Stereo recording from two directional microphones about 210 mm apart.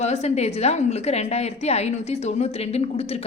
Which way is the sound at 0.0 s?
30° left (ahead or behind).